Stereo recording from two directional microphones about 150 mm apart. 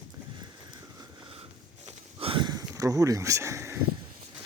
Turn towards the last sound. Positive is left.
turn(degrees=-20)  # may be behind; listen again after turning